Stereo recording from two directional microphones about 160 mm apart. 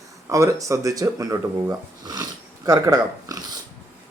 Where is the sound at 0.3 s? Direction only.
20° right (ahead or behind).